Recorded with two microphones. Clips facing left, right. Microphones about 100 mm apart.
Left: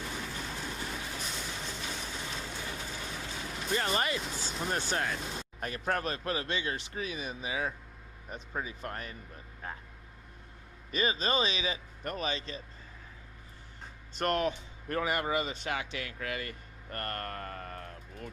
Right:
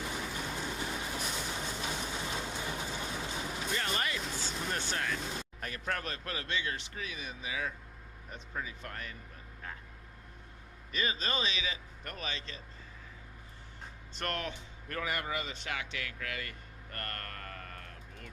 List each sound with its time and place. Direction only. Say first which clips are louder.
0.0 s vehicle: right 1 dB; 10° right (ahead or behind)
3.8 s speech: left 6 dB; 30° left (ahead or behind)
4.2 s speech: left 1 dB; 5° left (ahead or behind)
4.9 s speech: left 3 dB; 30° left (ahead or behind)
5.2 s speech: even; centre (ahead or behind)
5.5 s speech: left 6 dB; 30° left (ahead or behind)
10.9 s speech: left 5 dB; 25° left (ahead or behind)
14.1 s speech: left 8 dB; 15° left (ahead or behind)
16.0 s a sound: left 3 dB; 25° left (ahead or behind)